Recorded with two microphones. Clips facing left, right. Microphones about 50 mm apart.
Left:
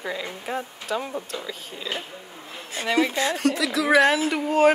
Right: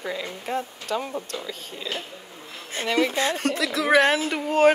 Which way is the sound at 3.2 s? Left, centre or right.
Right.